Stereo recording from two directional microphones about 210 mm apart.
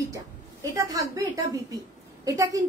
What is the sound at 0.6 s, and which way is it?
A woman's voice, 15° right (ahead or behind).